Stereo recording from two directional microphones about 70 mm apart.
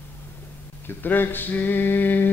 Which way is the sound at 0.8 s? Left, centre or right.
Left.